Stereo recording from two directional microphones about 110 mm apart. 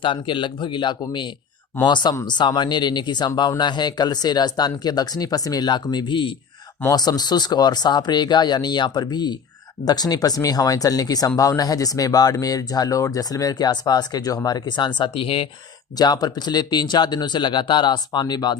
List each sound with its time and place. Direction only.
0.0 s speech: 45° left (ahead or behind)
16.0 s speech: 35° left (ahead or behind)